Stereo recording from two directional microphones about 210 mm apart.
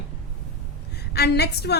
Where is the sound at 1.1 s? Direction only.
50° left (ahead or behind).